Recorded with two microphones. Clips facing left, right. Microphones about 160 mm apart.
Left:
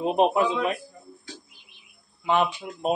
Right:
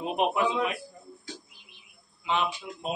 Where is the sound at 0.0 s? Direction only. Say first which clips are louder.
Left 5 dB; 35° left (ahead or behind).